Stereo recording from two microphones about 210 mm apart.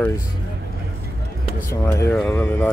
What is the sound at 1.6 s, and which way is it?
Speech, 15° left (ahead or behind).